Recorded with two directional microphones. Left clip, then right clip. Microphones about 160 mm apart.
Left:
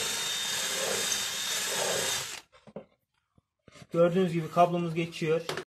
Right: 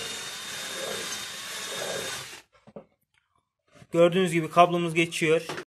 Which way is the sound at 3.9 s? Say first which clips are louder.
Right 4 dB; 5° right (ahead or behind).